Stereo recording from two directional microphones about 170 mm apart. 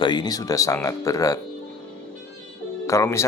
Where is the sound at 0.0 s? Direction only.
25° left (ahead or behind).